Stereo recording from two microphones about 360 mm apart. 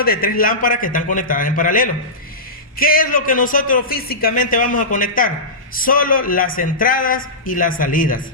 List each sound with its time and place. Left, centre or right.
0.0 s a man's voice: left